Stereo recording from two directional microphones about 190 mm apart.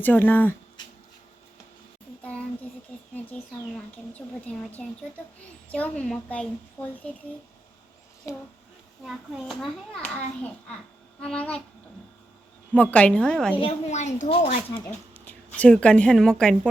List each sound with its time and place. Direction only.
0.0 s a woman's voice: 10° left (ahead or behind)
3.3 s a child's voice: 5° left (ahead or behind)
8.3 s a woman's voice: 15° left (ahead or behind)
9.0 s a child's voice: centre (ahead or behind)
12.7 s a child's voice: 5° left (ahead or behind)
13.6 s a woman's voice: 35° left (ahead or behind)
15.5 s a child's voice: 5° left (ahead or behind)